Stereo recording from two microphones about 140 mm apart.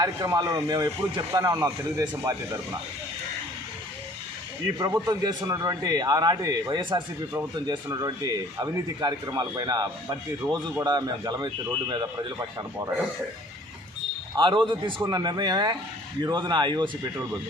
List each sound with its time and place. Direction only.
0.0 s speech: 25° right (ahead or behind)
4.8 s speech: 30° right (ahead or behind)
14.3 s a man's voice: 35° right (ahead or behind)